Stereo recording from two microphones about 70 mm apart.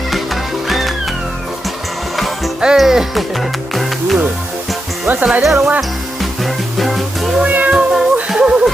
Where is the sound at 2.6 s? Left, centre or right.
Centre.